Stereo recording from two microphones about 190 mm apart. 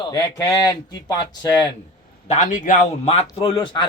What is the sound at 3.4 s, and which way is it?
Speech, 25° left (ahead or behind).